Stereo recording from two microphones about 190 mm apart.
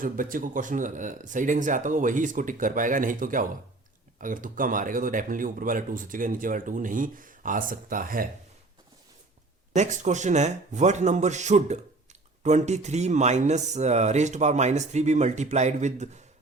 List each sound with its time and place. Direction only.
0.0 s speech: 45° right (ahead or behind)
9.7 s speech: 40° right (ahead or behind)